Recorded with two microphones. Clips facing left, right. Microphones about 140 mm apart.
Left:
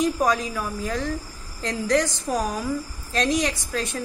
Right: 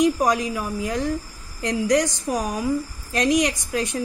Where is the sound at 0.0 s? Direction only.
15° right (ahead or behind).